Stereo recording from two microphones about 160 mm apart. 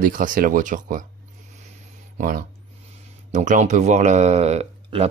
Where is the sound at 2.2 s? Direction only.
60° right (ahead or behind).